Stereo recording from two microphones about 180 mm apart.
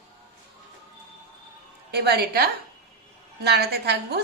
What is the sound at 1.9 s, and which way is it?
A woman's voice, 65° right (ahead or behind).